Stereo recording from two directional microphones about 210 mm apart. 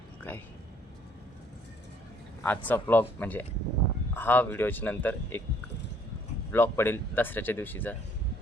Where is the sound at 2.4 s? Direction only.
10° left (ahead or behind).